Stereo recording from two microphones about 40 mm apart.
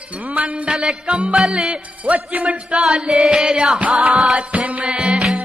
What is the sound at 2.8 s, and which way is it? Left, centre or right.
Music, right.